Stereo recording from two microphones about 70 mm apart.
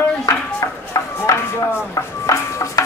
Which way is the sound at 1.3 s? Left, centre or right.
Left.